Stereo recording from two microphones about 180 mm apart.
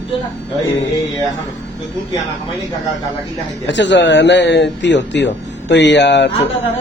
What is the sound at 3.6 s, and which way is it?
Speech, 80° left.